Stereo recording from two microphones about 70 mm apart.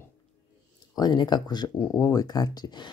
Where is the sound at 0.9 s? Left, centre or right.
Left.